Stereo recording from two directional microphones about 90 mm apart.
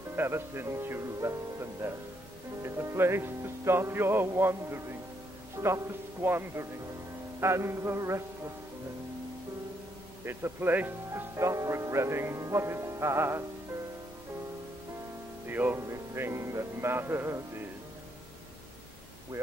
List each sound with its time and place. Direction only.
0.1 s music: 25° right (ahead or behind)
10.2 s music: 25° right (ahead or behind)
11.3 s music: 35° right (ahead or behind)
15.4 s speech: 20° right (ahead or behind)
15.9 s music: 30° right (ahead or behind)